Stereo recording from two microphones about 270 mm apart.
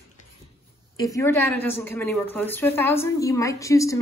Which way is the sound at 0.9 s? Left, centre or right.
Centre.